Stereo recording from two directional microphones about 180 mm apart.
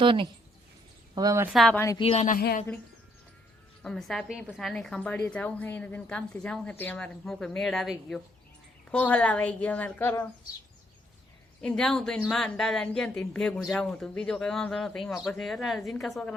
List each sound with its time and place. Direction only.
0.0 s speech: 30° right (ahead or behind)
1.5 s a woman's voice: centre (ahead or behind)
2.0 s speech: 35° left (ahead or behind)
3.8 s a woman's voice: centre (ahead or behind)
11.6 s a woman's voice: 5° left (ahead or behind)